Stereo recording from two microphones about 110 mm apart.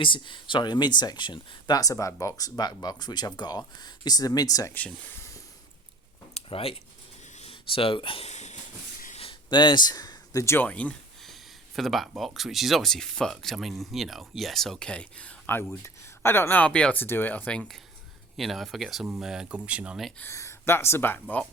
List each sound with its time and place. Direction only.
0.0 s speech: 50° left (ahead or behind)
6.3 s a sound: 60° left (ahead or behind)
7.5 s speech: 55° left (ahead or behind)
8.3 s a sound: 90° left
9.5 s speech: 45° left (ahead or behind); by 10.7 s 25° left (ahead or behind)
10.7 s speech: 15° left (ahead or behind)
11.2 s speech: centre (ahead or behind)
18.3 s speech: centre (ahead or behind)
20.1 s speech: 25° left (ahead or behind)